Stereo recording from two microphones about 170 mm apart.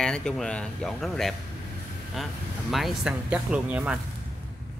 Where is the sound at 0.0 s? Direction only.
5° left (ahead or behind).